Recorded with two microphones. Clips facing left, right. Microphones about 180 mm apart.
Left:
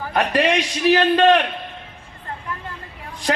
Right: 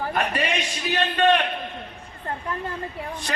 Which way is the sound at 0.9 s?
85° left.